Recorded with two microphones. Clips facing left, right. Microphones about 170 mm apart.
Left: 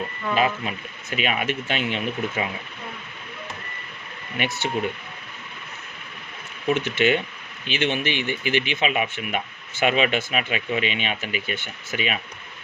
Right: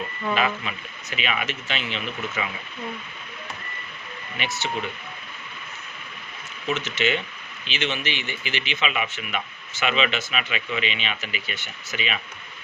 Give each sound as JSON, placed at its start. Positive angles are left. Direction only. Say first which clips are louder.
{"t": 0.3, "sound": "a man's voice", "louder": "left 4 dB", "side_deg": 40}
{"t": 4.4, "sound": "speech", "louder": "left 4 dB", "side_deg": 60}
{"t": 6.7, "sound": "a man's voice", "louder": "left 4 dB", "side_deg": 55}